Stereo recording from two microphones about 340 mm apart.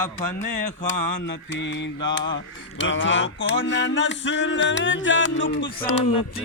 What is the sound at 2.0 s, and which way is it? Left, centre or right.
Mantra, centre.